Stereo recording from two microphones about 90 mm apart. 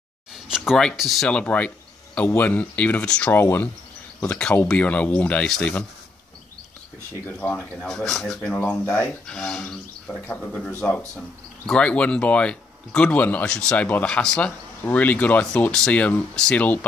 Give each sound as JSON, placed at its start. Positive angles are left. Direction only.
{"t": 0.3, "sound": "speech", "side_deg": -5}
{"t": 1.3, "sound": "speech", "side_deg": 15}
{"t": 3.3, "sound": "speech", "side_deg": 25}
{"t": 4.3, "sound": "speech", "side_deg": 10}
{"t": 7.3, "sound": "speech", "side_deg": 10}
{"t": 8.5, "sound": "speech", "side_deg": 20}
{"t": 9.2, "sound": "speech", "side_deg": 5}